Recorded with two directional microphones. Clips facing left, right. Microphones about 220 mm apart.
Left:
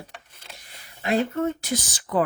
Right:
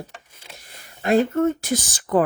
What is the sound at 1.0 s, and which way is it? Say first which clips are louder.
Speech: right 5 dB; 50° right (ahead or behind).